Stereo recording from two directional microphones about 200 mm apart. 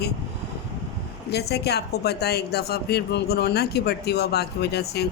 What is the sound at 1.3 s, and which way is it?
A woman's voice, 55° left (ahead or behind).